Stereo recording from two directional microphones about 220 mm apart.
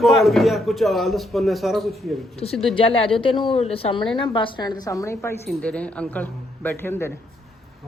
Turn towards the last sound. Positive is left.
turn(degrees=10)  # may be behind; listen again after turning